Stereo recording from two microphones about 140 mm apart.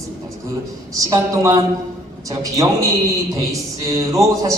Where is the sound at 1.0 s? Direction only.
25° right (ahead or behind).